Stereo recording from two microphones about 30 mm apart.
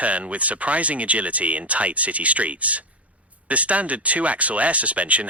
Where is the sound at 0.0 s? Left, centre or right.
Right.